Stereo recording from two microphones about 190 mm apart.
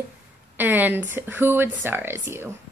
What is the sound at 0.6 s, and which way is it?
A woman's voice, 10° right (ahead or behind).